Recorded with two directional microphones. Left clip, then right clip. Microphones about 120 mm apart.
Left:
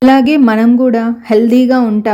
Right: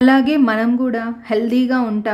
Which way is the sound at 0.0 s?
35° left (ahead or behind).